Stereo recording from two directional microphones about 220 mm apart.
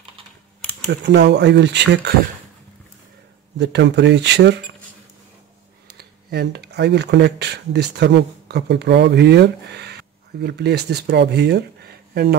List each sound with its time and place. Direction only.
1.0 s speech: 50° right (ahead or behind)
3.5 s speech: 50° right (ahead or behind)
5.9 s speech: 45° right (ahead or behind)